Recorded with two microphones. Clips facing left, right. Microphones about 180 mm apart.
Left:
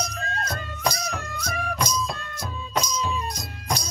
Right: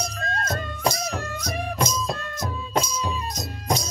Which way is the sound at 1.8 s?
25° right (ahead or behind).